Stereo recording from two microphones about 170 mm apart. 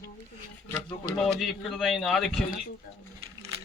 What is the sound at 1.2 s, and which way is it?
A man's voice, centre (ahead or behind).